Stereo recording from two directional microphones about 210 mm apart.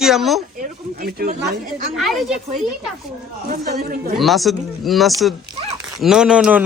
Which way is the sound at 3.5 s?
45° right (ahead or behind).